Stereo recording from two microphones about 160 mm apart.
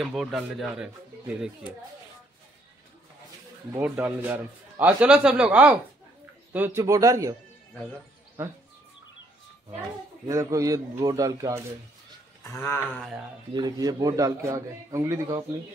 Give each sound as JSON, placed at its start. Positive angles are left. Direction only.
{"t": 0.0, "sound": "speech", "side_deg": 0}
{"t": 3.7, "sound": "a man's voice", "side_deg": -10}
{"t": 10.2, "sound": "a man's voice", "side_deg": -20}
{"t": 12.4, "sound": "a sound", "side_deg": 15}
{"t": 13.5, "sound": "a man's voice", "side_deg": -25}